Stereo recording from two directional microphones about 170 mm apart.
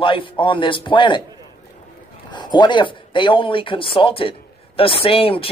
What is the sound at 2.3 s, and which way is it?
Speech, 25° left (ahead or behind).